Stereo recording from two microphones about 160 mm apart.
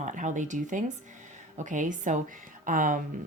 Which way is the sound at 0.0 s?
50° right (ahead or behind).